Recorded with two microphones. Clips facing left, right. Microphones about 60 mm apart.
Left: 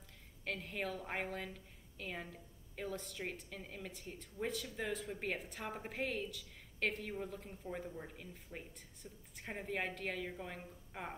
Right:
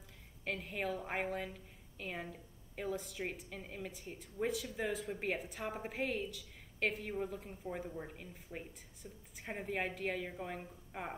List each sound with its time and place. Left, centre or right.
0.5 s a woman's voice: centre